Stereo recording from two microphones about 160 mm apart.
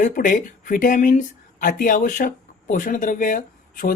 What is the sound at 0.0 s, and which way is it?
A woman's voice, 55° left (ahead or behind).